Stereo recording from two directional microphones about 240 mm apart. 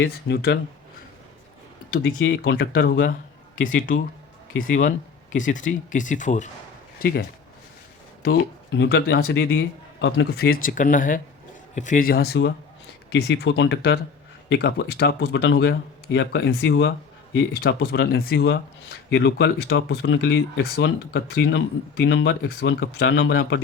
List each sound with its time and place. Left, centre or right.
0.0 s speech: left
1.9 s speech: left
3.8 s speech: left